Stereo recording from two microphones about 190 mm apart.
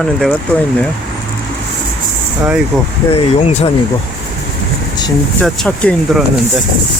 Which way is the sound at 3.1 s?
35° left (ahead or behind).